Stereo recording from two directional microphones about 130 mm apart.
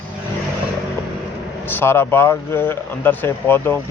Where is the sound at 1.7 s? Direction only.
20° left (ahead or behind).